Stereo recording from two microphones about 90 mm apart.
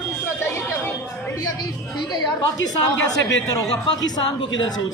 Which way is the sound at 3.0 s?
45° left (ahead or behind).